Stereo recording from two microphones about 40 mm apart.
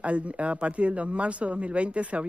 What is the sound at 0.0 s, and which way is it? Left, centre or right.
Speech, right.